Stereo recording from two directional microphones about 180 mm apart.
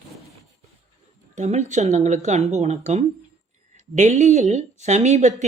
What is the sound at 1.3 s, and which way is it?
A woman's voice, 40° right (ahead or behind).